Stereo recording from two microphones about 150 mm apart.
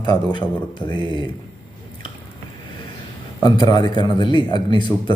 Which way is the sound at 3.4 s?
30° left (ahead or behind).